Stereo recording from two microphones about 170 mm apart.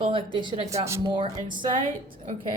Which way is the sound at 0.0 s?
30° right (ahead or behind).